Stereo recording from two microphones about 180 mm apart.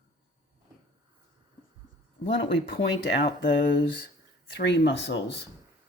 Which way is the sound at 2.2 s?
85° left.